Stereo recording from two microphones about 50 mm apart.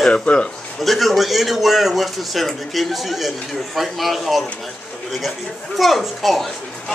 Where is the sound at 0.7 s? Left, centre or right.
Centre.